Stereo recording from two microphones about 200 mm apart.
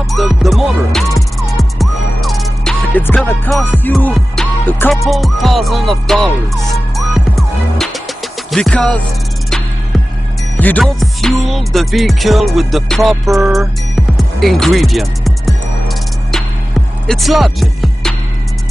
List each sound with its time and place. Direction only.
0.1 s music: centre (ahead or behind)
10.6 s music: 5° left (ahead or behind)